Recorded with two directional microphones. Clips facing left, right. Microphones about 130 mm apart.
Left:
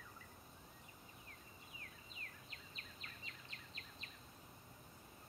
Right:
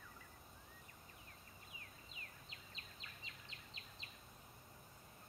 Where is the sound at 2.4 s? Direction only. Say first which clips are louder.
Left 1 dB; 20° right (ahead or behind).